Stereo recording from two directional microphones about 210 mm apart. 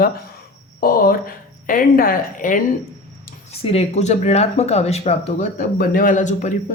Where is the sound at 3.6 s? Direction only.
30° left (ahead or behind).